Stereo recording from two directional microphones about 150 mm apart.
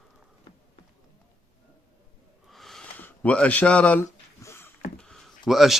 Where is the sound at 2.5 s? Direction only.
Centre (ahead or behind).